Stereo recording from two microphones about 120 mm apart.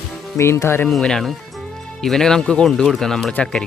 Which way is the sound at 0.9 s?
5° left (ahead or behind).